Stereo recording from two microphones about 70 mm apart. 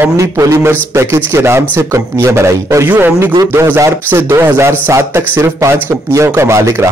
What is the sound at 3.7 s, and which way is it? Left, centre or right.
A man's voice, right.